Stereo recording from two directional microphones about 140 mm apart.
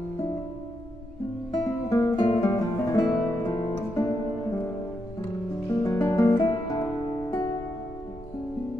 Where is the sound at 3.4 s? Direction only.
25° left (ahead or behind).